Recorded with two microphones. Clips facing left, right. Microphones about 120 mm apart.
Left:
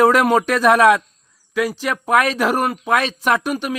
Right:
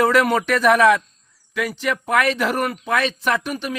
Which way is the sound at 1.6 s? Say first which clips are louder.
Left 2 dB; 40° left (ahead or behind).